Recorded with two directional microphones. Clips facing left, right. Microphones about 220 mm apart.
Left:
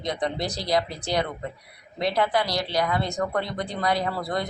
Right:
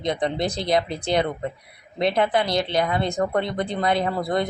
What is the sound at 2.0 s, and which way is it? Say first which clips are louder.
Speech: right 3 dB; 25° right (ahead or behind).